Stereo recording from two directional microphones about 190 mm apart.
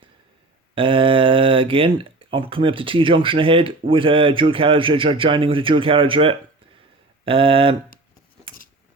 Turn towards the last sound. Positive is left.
turn(degrees=-30)  # may be behind; listen again after turning